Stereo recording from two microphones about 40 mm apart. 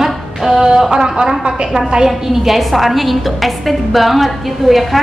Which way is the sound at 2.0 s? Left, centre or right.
Centre.